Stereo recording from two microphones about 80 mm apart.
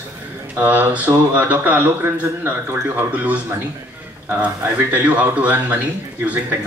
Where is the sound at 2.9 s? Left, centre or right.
Centre.